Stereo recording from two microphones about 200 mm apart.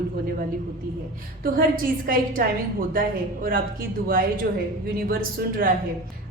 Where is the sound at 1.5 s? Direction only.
45° right (ahead or behind).